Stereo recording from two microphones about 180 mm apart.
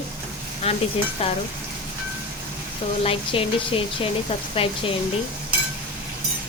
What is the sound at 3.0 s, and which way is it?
A woman's voice, 30° left (ahead or behind).